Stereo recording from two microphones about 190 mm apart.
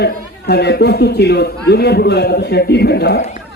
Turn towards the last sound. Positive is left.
turn(degrees=60)  # may be behind; listen again after turning